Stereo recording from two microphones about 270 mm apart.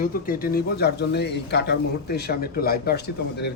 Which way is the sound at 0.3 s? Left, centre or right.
Left.